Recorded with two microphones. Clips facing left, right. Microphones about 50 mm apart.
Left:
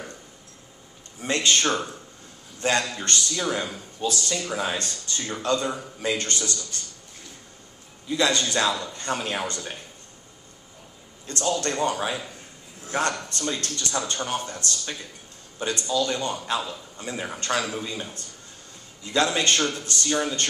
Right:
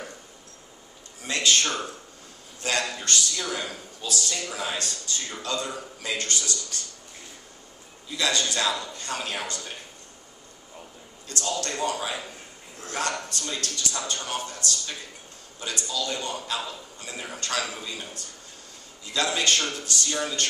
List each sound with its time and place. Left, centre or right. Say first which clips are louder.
1.2 s speech: left 2 dB; left
8.2 s speech: left 3 dB; left
11.4 s speech: left 4 dB; left
13.3 s speech: left 3 dB; left